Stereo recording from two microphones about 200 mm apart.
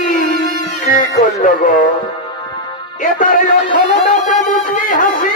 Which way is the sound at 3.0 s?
40° left (ahead or behind).